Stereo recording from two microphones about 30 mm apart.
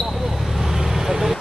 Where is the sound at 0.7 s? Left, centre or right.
Centre.